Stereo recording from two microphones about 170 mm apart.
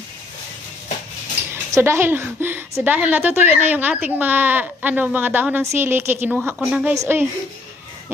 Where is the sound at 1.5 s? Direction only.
15° right (ahead or behind).